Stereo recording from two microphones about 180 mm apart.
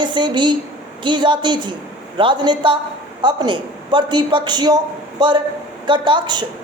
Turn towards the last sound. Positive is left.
turn(degrees=-25)  # may be behind; listen again after turning